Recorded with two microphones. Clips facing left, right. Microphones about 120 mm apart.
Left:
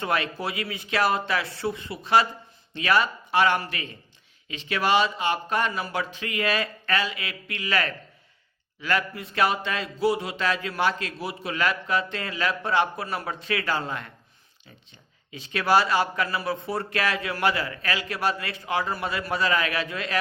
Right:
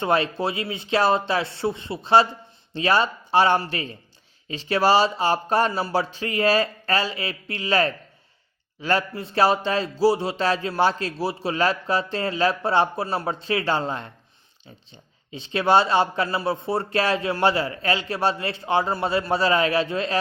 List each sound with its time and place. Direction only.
0.0 s a man's voice: 25° right (ahead or behind)
15.3 s speech: 30° right (ahead or behind)